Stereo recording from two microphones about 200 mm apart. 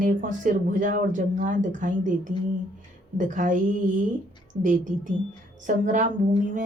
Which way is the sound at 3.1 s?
40° right (ahead or behind).